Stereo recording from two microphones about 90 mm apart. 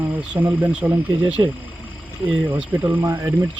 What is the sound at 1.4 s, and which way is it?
Speech, 40° right (ahead or behind).